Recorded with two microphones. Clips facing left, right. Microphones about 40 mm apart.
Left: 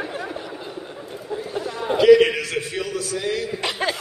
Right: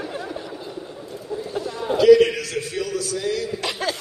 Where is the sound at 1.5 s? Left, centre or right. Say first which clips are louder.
Even; left.